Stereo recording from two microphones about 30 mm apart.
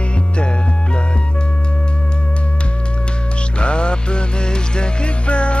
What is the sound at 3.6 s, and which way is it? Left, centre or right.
Music, left.